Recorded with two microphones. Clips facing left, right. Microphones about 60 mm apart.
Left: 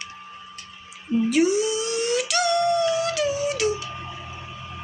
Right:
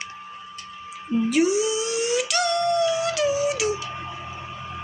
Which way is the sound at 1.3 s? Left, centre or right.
Centre.